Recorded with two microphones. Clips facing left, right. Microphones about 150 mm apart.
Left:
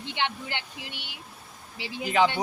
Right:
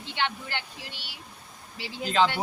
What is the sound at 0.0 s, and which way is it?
Speech, 15° left (ahead or behind).